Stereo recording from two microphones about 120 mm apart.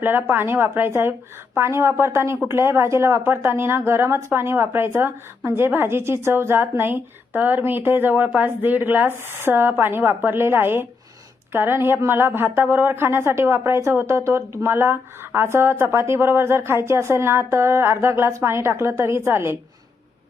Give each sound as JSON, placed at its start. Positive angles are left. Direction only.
{"t": 0.0, "sound": "a woman's voice", "side_deg": -20}